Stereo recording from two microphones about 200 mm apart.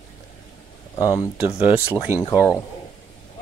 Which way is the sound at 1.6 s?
10° right (ahead or behind).